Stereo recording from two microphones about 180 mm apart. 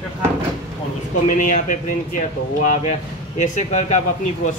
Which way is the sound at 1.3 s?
45° left (ahead or behind).